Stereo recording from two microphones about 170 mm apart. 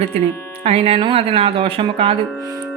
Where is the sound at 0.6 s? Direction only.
35° right (ahead or behind).